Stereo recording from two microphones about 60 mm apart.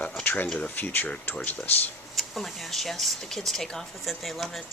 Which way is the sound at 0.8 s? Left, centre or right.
Left.